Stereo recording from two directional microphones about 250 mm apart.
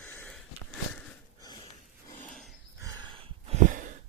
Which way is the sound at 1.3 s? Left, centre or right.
Centre.